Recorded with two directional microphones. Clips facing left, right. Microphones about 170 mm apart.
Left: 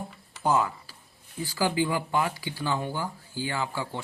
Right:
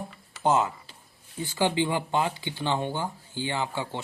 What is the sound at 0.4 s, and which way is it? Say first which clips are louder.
Speech: right 1 dB; 25° right (ahead or behind).